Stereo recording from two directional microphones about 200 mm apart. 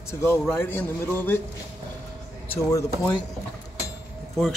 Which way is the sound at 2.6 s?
15° left (ahead or behind).